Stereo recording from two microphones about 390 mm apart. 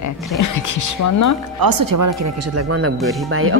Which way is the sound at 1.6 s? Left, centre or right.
Right.